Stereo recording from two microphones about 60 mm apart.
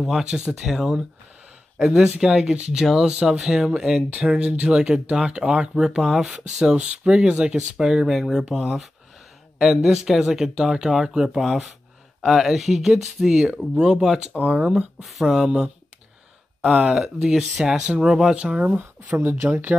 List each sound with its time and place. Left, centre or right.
0.0 s speech: centre
6.3 s speech: centre
13.7 s speech: centre
15.0 s speech: centre
15.4 s speech: centre
19.2 s speech: right